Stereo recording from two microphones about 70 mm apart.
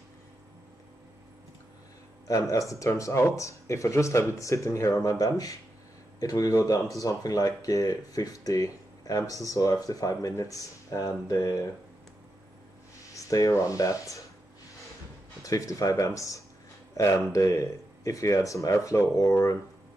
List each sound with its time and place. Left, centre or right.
2.5 s speech: left
13.1 s speech: left
15.4 s speech: left